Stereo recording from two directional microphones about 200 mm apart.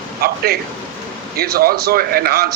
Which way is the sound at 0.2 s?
50° right (ahead or behind).